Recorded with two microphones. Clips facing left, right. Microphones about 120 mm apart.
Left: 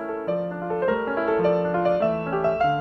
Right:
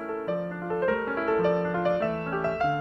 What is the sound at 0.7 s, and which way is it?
Music, 5° left (ahead or behind).